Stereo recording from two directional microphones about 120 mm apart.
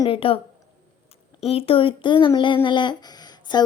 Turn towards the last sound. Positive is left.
turn(degrees=35)  # may be behind; listen again after turning